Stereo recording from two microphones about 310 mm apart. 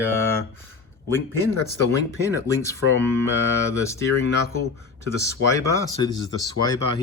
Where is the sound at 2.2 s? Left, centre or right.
Centre.